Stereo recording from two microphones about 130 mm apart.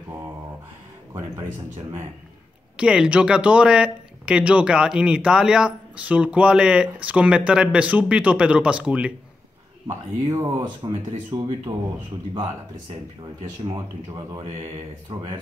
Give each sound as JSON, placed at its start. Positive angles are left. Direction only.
{"t": 2.8, "sound": "speech", "side_deg": -5}
{"t": 9.8, "sound": "speech", "side_deg": -20}
{"t": 13.7, "sound": "speech", "side_deg": -30}
{"t": 15.1, "sound": "speech", "side_deg": -45}